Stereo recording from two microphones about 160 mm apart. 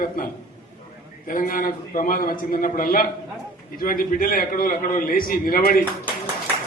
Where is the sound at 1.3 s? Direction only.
60° left (ahead or behind).